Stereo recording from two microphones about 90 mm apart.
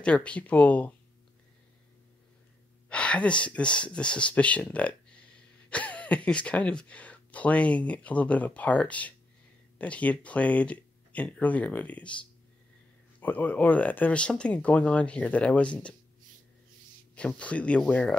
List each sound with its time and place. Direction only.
0.0 s speech: 15° left (ahead or behind)
2.9 s speech: 10° left (ahead or behind)
13.2 s speech: 20° left (ahead or behind)
17.4 s speech: 15° left (ahead or behind)